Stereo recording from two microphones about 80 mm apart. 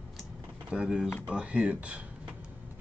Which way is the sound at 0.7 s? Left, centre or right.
Centre.